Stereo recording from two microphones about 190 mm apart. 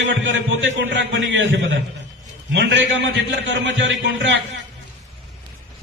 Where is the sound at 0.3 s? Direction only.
80° right.